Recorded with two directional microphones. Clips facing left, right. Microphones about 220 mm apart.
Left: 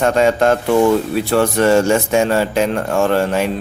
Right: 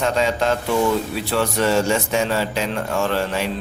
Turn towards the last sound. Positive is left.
turn(degrees=50)  # may be behind; listen again after turning